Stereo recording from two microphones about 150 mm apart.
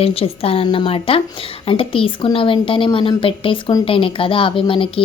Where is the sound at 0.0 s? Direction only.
40° left (ahead or behind).